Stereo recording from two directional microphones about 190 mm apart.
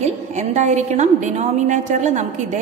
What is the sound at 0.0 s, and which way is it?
A woman's voice, 40° right (ahead or behind).